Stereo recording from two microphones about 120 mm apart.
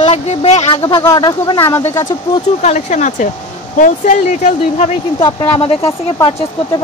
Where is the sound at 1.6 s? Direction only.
20° left (ahead or behind).